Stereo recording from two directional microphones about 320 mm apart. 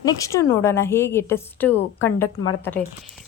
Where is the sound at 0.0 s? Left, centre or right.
Centre.